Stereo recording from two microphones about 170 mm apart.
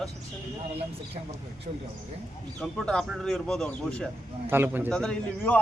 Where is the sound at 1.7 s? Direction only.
40° right (ahead or behind).